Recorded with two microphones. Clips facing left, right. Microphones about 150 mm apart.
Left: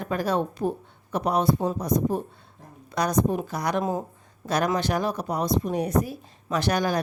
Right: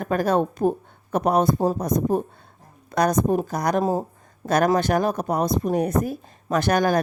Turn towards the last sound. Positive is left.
turn(degrees=-50)  # may be behind; listen again after turning